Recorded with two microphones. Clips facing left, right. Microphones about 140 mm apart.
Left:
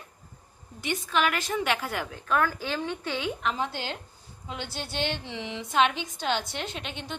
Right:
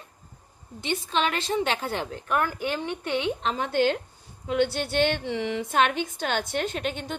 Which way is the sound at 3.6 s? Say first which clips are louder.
Right 8 dB; 55° right (ahead or behind).